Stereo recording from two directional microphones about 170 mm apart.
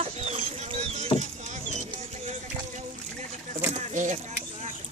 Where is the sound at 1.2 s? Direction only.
45° right (ahead or behind).